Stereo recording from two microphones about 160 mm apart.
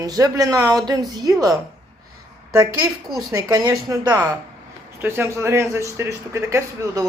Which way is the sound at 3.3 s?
20° right (ahead or behind).